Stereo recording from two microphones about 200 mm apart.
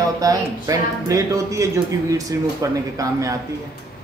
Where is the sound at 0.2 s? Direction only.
15° right (ahead or behind).